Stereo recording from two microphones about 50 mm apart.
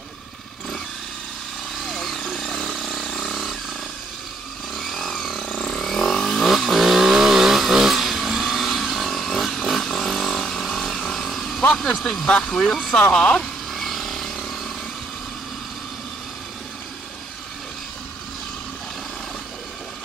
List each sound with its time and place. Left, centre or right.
1.8 s vehicle: centre
4.7 s chainsaw: centre
5.7 s vehicle: centre
11.7 s speech: centre
12.3 s speech: centre
13.1 s speech: centre
13.7 s vehicle: centre